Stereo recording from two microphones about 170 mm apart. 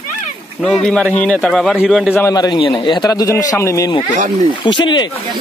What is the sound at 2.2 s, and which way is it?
A man's voice, 20° left (ahead or behind).